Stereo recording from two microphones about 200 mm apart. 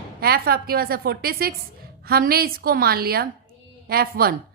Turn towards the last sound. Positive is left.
turn(degrees=-50)  # may be behind; listen again after turning